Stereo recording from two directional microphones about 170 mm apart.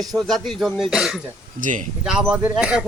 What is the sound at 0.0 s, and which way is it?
A man's voice, centre (ahead or behind).